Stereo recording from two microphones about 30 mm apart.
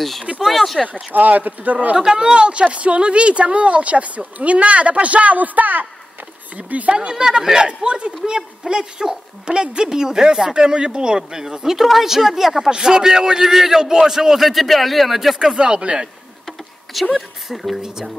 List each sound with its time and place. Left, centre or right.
0.5 s a man's voice: centre
0.8 s speech: right
2.0 s speech: centre; by 5.9 s right
6.5 s speech: right
6.9 s a woman's voice: right
10.5 s a woman's voice: right
11.6 s speech: centre
14.4 s a man's voice: centre
15.5 s speech: right
16.4 s a sound: centre
17.5 s a man's voice: centre